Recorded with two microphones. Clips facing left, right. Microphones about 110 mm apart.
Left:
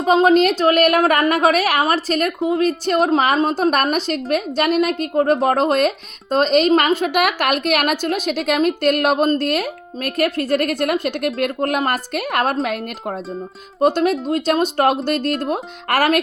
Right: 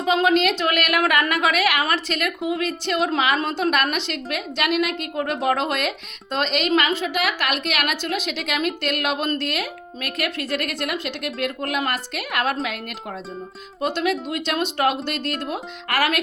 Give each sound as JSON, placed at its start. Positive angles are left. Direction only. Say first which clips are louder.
{"t": 0.0, "sound": "a woman's voice", "louder": "left 5 dB", "side_deg": 35}